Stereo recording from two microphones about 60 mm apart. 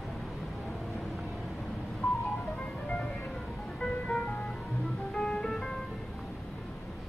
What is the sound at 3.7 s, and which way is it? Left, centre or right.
Music, centre.